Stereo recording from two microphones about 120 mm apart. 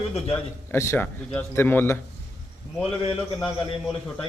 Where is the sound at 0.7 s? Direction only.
20° left (ahead or behind).